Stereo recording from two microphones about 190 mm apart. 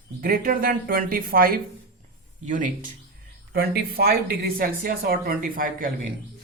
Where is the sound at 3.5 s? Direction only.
55° right (ahead or behind).